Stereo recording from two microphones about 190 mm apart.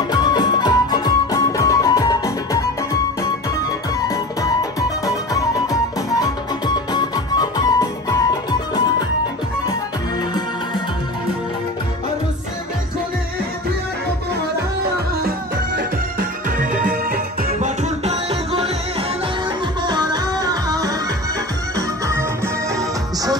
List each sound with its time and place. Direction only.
0.1 s music: 20° left (ahead or behind)
16.4 s music: 45° right (ahead or behind); by 23.3 s 20° right (ahead or behind)